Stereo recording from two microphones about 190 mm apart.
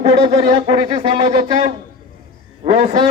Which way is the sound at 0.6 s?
25° right (ahead or behind).